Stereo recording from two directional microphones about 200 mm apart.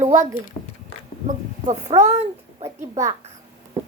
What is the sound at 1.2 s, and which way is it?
Speech, 40° right (ahead or behind).